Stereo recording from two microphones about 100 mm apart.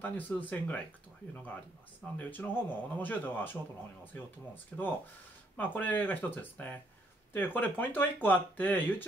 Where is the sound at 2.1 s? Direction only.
20° left (ahead or behind).